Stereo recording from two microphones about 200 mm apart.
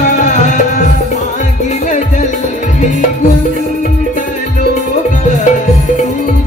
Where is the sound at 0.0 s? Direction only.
40° left (ahead or behind).